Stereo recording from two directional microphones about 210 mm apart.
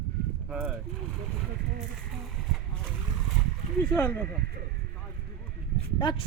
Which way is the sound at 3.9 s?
10° left (ahead or behind).